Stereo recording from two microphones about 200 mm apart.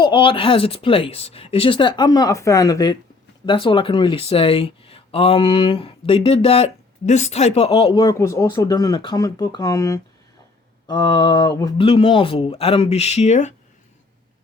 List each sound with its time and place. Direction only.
0.0 s speech: 25° left (ahead or behind)